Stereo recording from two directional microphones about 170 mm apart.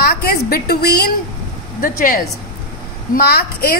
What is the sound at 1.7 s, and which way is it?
A woman's voice, 55° left (ahead or behind).